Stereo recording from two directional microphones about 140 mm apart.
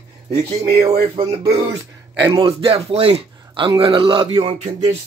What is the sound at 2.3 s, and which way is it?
A man's voice, 40° right (ahead or behind).